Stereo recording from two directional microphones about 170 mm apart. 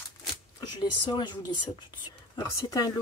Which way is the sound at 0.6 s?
25° left (ahead or behind).